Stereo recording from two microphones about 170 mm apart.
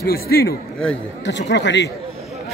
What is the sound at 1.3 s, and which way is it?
Speech, 90° left.